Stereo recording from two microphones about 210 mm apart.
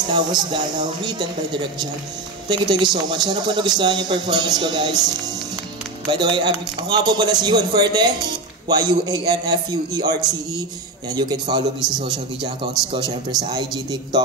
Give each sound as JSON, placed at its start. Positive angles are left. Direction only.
{"t": 0.1, "sound": "a man's voice", "side_deg": -20}